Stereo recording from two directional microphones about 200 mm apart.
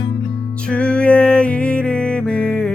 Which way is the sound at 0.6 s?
5° left (ahead or behind).